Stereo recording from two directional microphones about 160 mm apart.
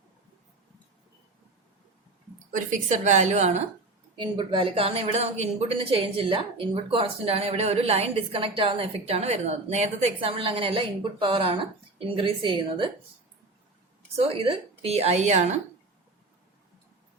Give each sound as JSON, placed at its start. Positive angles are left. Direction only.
{"t": 2.5, "sound": "a woman's voice", "side_deg": -50}
{"t": 4.2, "sound": "a woman's voice", "side_deg": -30}
{"t": 14.2, "sound": "a woman's voice", "side_deg": -35}